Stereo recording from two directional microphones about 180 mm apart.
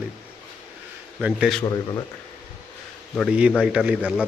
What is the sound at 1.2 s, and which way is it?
Speech, 5° right (ahead or behind).